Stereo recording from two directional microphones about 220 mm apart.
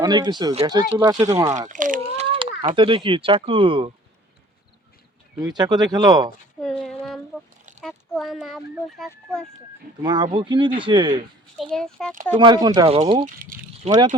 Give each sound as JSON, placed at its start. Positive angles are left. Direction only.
{"t": 0.0, "sound": "speech", "side_deg": -20}
{"t": 1.5, "sound": "speech", "side_deg": -35}
{"t": 2.3, "sound": "a sound", "side_deg": -25}
{"t": 2.7, "sound": "speech", "side_deg": -25}
{"t": 5.4, "sound": "speech", "side_deg": -20}
{"t": 6.6, "sound": "a sound", "side_deg": 0}
{"t": 7.9, "sound": "a child's voice", "side_deg": 0}
{"t": 10.0, "sound": "speech", "side_deg": -20}
{"t": 11.5, "sound": "a child's voice", "side_deg": 0}
{"t": 12.4, "sound": "speech", "side_deg": -20}
{"t": 13.0, "sound": "speech", "side_deg": -30}
{"t": 13.4, "sound": "a sound", "side_deg": -40}